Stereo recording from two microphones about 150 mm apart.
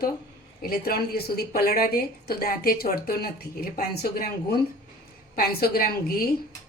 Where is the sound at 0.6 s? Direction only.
90° left.